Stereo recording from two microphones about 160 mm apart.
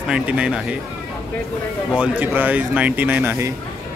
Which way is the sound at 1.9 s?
10° right (ahead or behind).